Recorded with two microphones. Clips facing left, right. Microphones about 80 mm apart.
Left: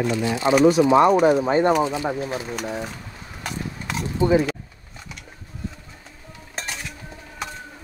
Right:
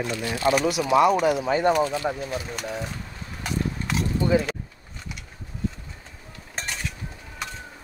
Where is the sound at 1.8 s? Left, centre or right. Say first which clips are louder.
Left 2 dB; left.